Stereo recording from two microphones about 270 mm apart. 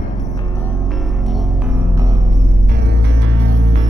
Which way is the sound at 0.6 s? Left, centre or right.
Centre.